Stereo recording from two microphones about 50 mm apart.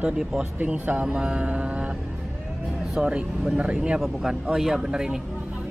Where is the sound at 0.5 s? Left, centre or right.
Right.